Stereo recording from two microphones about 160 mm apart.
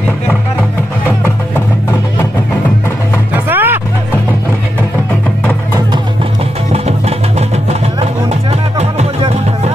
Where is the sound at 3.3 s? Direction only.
10° right (ahead or behind).